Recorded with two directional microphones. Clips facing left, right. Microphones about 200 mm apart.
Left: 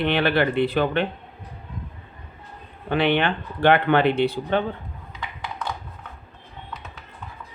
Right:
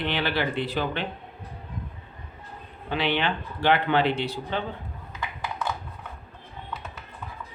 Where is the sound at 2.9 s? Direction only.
55° left (ahead or behind).